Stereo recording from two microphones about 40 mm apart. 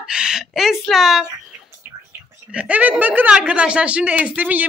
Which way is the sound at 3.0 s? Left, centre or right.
Right.